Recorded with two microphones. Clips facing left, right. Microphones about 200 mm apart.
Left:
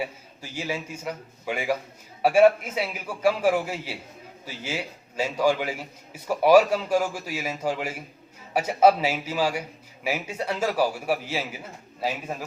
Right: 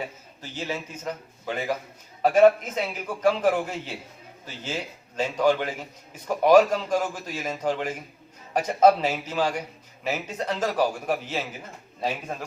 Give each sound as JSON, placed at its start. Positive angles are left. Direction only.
{"t": 0.5, "sound": "a man's voice", "side_deg": 10}